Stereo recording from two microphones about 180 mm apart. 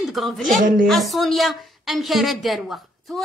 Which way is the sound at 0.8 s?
Centre (ahead or behind).